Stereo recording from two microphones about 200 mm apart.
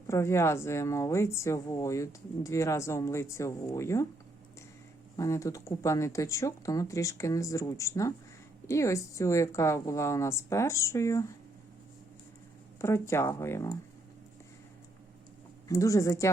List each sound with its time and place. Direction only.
0.1 s speech: 15° left (ahead or behind)
5.1 s speech: 15° left (ahead or behind)
12.8 s speech: 15° left (ahead or behind)
15.7 s speech: 15° left (ahead or behind)